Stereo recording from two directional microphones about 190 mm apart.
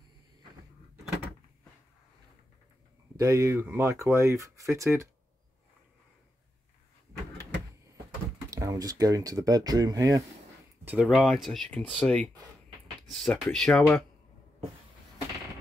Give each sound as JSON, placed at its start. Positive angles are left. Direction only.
{"t": 3.2, "sound": "speech", "side_deg": -15}
{"t": 8.5, "sound": "speech", "side_deg": -15}
{"t": 10.9, "sound": "speech", "side_deg": -5}